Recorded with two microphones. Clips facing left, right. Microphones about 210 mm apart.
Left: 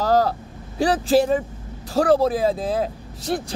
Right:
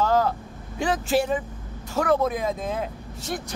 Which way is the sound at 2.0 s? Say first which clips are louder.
Left 5 dB; 35° left (ahead or behind).